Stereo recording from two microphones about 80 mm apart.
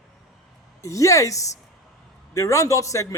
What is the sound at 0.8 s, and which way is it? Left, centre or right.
Speech, left.